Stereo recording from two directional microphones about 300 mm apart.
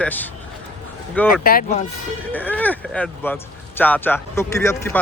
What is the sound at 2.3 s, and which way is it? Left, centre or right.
Speech, centre.